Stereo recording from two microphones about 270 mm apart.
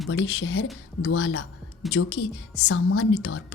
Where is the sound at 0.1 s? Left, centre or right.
Left.